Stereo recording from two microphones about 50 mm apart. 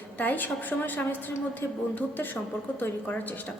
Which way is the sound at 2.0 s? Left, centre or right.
Left.